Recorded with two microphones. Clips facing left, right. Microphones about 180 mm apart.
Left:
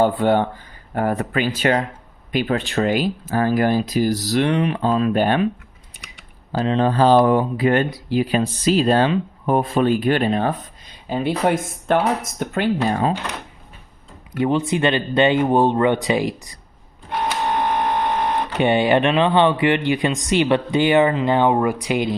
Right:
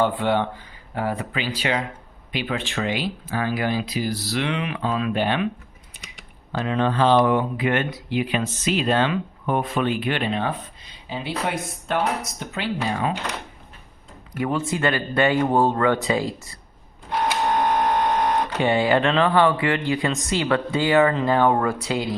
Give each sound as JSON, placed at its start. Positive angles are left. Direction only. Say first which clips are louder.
{"t": 0.0, "sound": "speech", "louder": "left 4 dB", "side_deg": 45}
{"t": 6.5, "sound": "speech", "louder": "left 4 dB", "side_deg": 35}
{"t": 14.3, "sound": "speech", "louder": "left 5 dB", "side_deg": 25}
{"t": 18.5, "sound": "speech", "louder": "left 5 dB", "side_deg": 20}